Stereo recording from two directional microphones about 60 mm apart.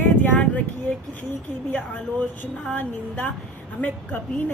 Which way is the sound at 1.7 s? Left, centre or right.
Left.